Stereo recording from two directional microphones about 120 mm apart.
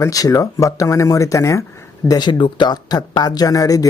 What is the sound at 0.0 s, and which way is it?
Speech, 30° left (ahead or behind).